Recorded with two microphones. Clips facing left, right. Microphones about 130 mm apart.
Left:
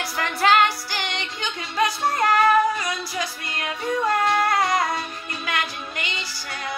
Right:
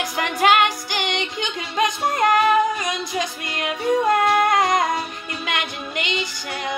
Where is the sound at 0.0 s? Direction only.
15° right (ahead or behind).